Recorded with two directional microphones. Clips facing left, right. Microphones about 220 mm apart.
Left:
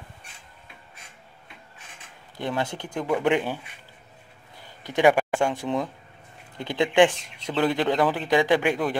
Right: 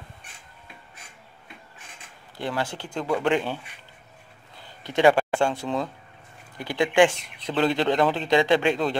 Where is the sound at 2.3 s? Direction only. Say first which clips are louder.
Left 1 dB; 20° left (ahead or behind).